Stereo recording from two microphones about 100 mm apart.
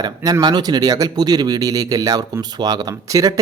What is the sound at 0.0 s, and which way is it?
Speech, 40° right (ahead or behind).